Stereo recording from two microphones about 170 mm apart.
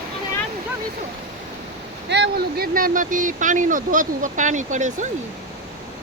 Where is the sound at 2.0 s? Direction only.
90° right; by 5.0 s 45° right (ahead or behind).